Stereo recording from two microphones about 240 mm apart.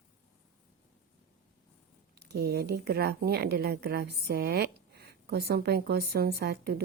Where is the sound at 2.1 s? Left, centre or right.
Right.